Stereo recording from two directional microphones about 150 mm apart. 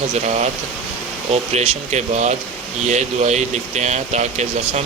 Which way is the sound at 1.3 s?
45° right (ahead or behind).